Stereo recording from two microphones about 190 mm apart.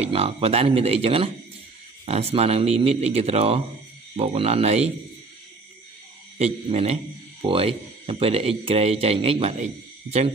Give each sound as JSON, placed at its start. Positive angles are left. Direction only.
{"t": 0.0, "sound": "speech", "side_deg": -30}
{"t": 6.3, "sound": "speech", "side_deg": -30}